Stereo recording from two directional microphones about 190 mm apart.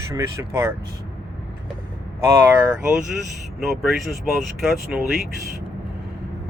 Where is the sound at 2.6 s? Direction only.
5° right (ahead or behind).